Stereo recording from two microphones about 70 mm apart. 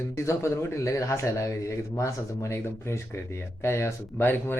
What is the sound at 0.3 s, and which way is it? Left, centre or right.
Speech, left.